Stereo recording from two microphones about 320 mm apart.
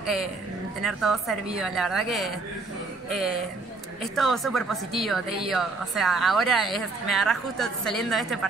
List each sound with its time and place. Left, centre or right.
0.0 s a woman's voice: centre